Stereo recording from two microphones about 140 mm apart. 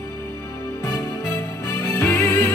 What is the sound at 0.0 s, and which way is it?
Music, 15° left (ahead or behind).